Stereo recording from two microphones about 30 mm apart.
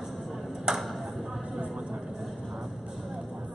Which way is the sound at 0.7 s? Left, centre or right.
Right.